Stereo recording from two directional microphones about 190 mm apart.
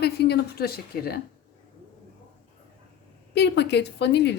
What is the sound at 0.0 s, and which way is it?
Speech, 60° left (ahead or behind).